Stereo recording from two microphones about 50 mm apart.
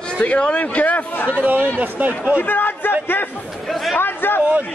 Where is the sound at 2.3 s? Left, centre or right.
Left.